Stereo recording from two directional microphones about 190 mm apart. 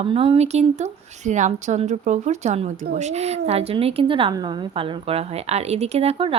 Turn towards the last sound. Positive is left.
turn(degrees=-30)  # may be behind; listen again after turning